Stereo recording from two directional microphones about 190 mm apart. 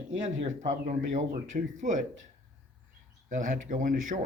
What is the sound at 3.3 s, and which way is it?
Speech, 40° right (ahead or behind).